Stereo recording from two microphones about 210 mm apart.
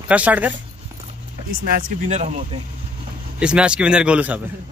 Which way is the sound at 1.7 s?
35° right (ahead or behind).